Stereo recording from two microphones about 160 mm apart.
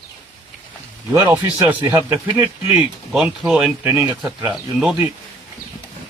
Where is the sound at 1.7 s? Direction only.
10° right (ahead or behind).